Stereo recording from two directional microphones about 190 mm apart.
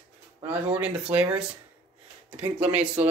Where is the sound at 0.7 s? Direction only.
5° right (ahead or behind).